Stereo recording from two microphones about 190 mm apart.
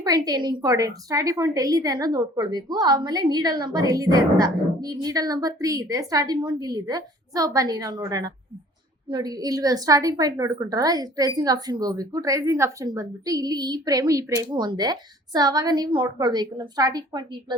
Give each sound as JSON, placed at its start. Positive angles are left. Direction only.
{"t": 0.0, "sound": "a woman's voice", "side_deg": -20}